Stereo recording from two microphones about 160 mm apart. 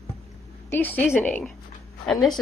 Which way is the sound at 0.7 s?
10° left (ahead or behind).